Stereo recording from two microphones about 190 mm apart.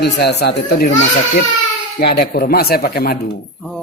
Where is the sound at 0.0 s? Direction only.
60° left (ahead or behind).